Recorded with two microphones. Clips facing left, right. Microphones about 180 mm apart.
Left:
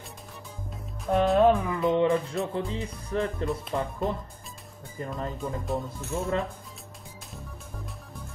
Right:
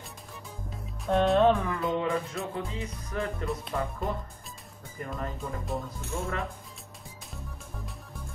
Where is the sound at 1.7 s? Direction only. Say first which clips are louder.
Left 5 dB; 20° left (ahead or behind).